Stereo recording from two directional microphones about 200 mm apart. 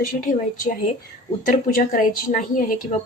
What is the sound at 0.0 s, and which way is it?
Speech, 45° left (ahead or behind).